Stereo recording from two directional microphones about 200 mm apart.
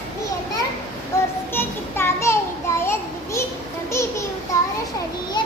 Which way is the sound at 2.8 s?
15° left (ahead or behind).